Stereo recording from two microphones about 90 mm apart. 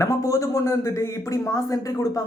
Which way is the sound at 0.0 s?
35° left (ahead or behind).